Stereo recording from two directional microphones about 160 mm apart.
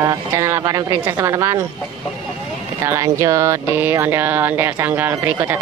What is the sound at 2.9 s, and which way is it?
Speech, 20° right (ahead or behind).